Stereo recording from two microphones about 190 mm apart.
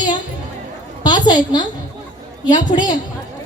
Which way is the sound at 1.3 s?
20° left (ahead or behind).